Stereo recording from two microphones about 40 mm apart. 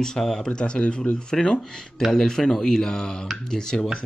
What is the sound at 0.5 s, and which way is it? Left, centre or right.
Speech, left.